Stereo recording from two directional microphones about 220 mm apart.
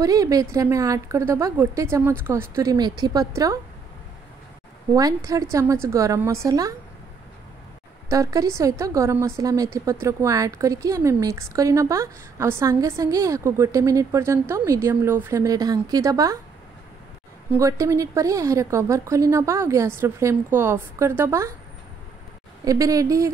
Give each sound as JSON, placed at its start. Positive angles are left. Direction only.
{"t": 0.0, "sound": "a woman's voice", "side_deg": -15}
{"t": 4.9, "sound": "a woman's voice", "side_deg": -15}
{"t": 8.1, "sound": "a woman's voice", "side_deg": -15}
{"t": 17.5, "sound": "a woman's voice", "side_deg": -15}
{"t": 22.7, "sound": "a woman's voice", "side_deg": -15}